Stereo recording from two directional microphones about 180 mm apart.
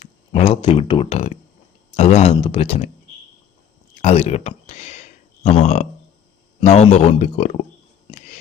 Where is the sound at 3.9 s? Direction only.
40° left (ahead or behind).